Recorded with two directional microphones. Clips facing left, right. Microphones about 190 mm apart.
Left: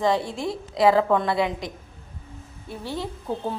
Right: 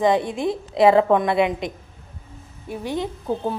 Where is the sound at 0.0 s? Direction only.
20° right (ahead or behind).